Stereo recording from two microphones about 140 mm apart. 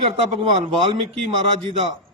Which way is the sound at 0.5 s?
45° right (ahead or behind).